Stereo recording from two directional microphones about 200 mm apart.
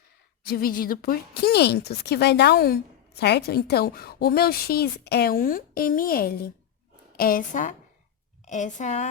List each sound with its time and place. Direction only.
0.4 s a woman's voice: 50° left (ahead or behind)